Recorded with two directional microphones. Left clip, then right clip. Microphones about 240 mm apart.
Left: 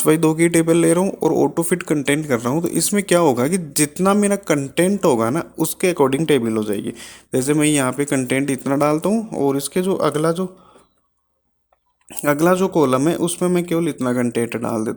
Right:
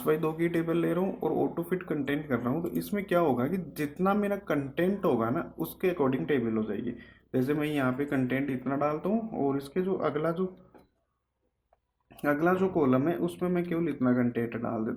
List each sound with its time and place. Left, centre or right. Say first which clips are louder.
0.0 s speech: left 12 dB; left
12.1 s speech: left 10 dB; left